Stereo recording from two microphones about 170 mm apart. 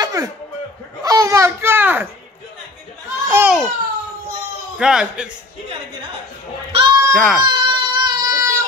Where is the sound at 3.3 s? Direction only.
10° right (ahead or behind).